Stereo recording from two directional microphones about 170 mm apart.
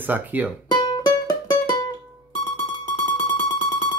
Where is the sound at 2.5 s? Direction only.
25° left (ahead or behind).